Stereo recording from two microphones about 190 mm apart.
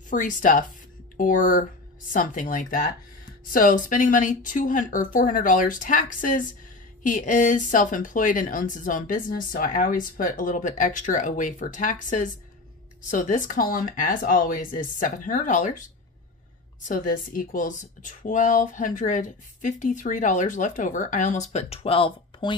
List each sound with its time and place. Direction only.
0.1 s speech: 40° left (ahead or behind)